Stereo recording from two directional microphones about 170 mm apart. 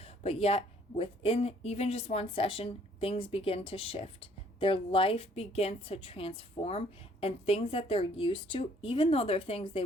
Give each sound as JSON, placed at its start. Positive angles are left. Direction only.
{"t": 0.0, "sound": "a woman's voice", "side_deg": 35}